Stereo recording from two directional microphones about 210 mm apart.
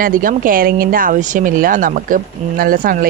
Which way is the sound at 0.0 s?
40° right (ahead or behind).